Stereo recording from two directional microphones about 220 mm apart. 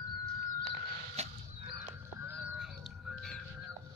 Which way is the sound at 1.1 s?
30° right (ahead or behind).